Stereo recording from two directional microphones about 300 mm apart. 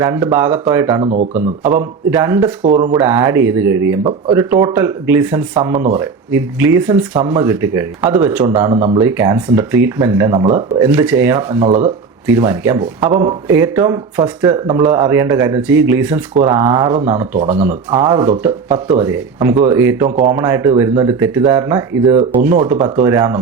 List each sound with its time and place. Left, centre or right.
0.0 s speech: centre